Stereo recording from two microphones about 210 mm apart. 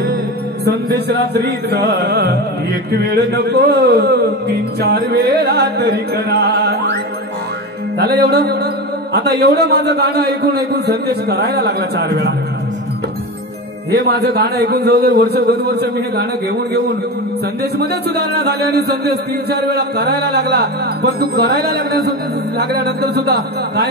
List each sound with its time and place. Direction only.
0.7 s a man's voice: 50° right (ahead or behind)
3.4 s a man's voice: 50° right (ahead or behind)
8.0 s a man's voice: 50° right (ahead or behind)
13.9 s a man's voice: 50° right (ahead or behind)
17.7 s a man's voice: 50° right (ahead or behind)